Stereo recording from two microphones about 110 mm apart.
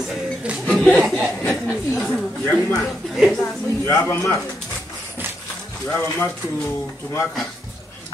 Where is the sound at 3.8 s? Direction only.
30° left (ahead or behind).